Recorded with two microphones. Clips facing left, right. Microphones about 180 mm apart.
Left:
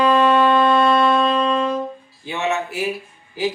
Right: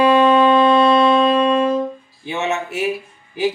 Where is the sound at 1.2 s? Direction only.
15° right (ahead or behind).